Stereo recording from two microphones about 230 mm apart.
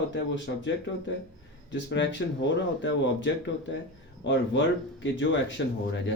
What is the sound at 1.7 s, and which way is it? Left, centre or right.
Speech, left.